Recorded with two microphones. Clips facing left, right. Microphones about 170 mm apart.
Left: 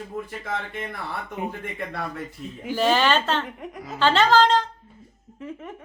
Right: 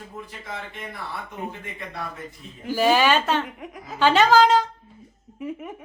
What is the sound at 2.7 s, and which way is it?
A woman's voice, 10° right (ahead or behind).